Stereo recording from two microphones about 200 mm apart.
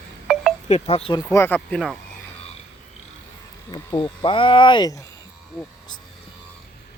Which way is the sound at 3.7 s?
20° left (ahead or behind).